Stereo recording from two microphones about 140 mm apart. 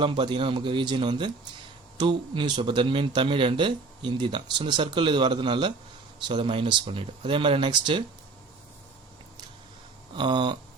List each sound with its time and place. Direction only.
0.0 s speech: 35° right (ahead or behind)
10.2 s speech: 30° right (ahead or behind)